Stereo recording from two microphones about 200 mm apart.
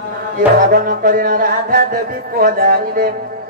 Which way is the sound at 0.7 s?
45° right (ahead or behind).